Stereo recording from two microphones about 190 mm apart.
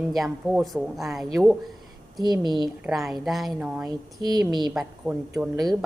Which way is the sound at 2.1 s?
20° right (ahead or behind).